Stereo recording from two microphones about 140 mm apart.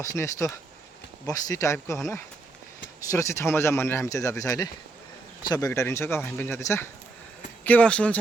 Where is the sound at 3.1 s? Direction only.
20° left (ahead or behind).